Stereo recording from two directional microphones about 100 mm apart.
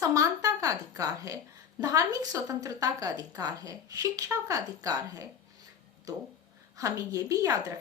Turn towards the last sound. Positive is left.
turn(degrees=-35)  # may be behind; listen again after turning